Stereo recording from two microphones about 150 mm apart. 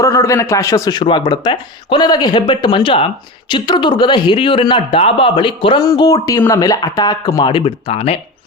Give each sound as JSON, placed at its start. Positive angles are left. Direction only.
{"t": 0.0, "sound": "a man's voice", "side_deg": 20}